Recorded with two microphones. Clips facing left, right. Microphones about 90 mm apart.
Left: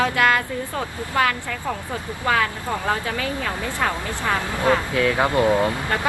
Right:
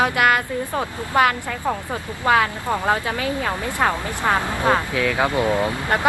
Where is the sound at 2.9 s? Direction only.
25° right (ahead or behind).